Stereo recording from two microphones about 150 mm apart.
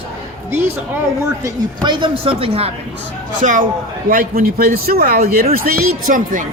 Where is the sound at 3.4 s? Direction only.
60° right (ahead or behind).